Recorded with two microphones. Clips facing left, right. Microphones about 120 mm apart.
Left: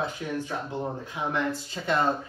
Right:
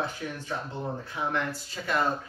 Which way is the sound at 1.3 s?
20° left (ahead or behind).